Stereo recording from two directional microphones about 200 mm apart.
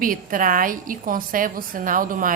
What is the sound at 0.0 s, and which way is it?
A woman's voice, 45° right (ahead or behind).